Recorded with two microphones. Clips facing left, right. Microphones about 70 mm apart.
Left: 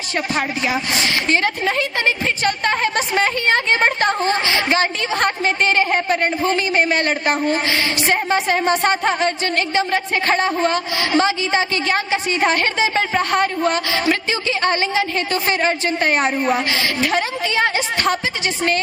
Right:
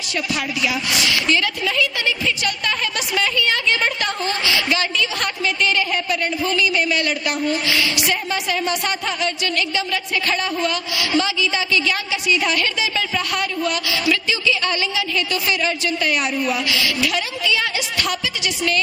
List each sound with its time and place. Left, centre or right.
0.3 s a woman's voice: left